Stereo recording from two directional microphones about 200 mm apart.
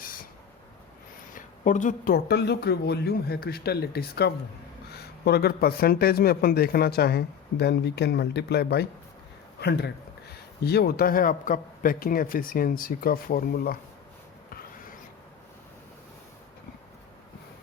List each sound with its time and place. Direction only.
1.3 s speech: 40° left (ahead or behind)